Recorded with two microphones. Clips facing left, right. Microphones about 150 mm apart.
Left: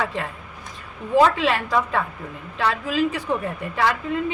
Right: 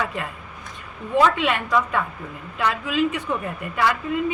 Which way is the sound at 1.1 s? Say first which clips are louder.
Left 2 dB; 30° left (ahead or behind).